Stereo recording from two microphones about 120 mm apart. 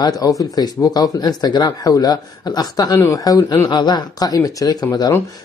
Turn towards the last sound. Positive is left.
turn(degrees=30)  # may be behind; listen again after turning